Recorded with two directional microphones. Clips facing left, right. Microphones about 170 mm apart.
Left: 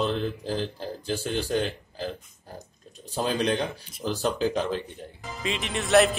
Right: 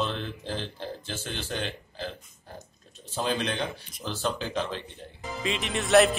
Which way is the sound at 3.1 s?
40° left (ahead or behind).